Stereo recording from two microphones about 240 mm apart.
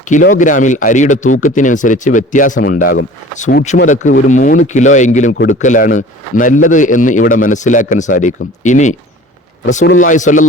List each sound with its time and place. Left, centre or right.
0.0 s a man's voice: left